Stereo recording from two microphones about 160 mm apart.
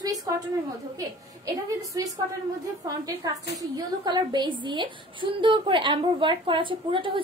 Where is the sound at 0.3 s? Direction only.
20° right (ahead or behind).